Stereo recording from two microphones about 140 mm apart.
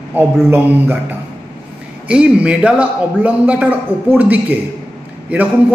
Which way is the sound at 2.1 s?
10° right (ahead or behind).